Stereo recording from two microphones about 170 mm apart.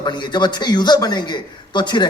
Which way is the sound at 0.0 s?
25° left (ahead or behind).